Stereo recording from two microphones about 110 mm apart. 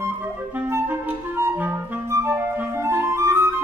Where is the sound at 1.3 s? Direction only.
25° right (ahead or behind).